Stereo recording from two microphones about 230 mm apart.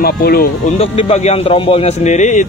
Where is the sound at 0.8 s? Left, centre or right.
Left.